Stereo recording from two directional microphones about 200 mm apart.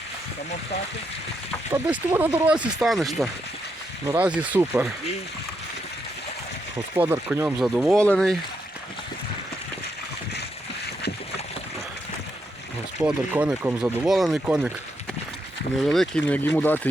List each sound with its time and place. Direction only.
1.7 s speech: 10° right (ahead or behind)
4.0 s speech: 15° right (ahead or behind)
6.9 s speech: 10° right (ahead or behind)
13.0 s speech: 5° right (ahead or behind)
15.8 s speech: centre (ahead or behind)